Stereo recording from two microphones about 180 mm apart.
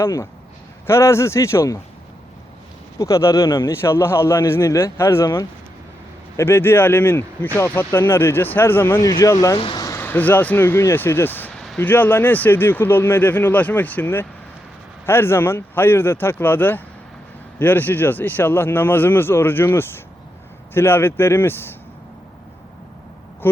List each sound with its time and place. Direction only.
0.0 s speech: 15° left (ahead or behind)
3.0 s speech: 15° left (ahead or behind)